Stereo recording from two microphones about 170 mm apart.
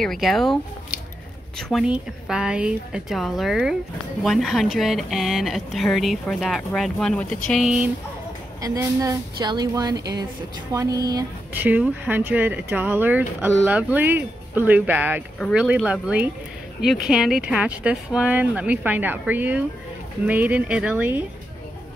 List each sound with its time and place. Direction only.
0.0 s speech: centre (ahead or behind)
1.6 s speech: centre (ahead or behind)
8.5 s a woman's voice: 20° right (ahead or behind)
11.5 s speech: 10° right (ahead or behind)